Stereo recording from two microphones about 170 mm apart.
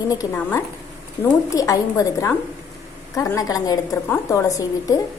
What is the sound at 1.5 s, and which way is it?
A woman's voice, 20° left (ahead or behind).